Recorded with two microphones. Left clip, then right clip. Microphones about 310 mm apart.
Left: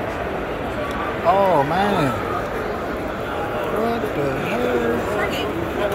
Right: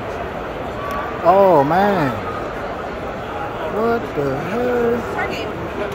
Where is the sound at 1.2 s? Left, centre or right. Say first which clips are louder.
Right 5 dB; right.